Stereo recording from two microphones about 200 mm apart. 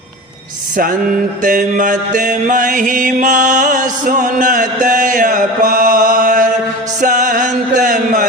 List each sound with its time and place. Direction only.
1.5 s mantra: 40° right (ahead or behind)
7.0 s music: 40° right (ahead or behind)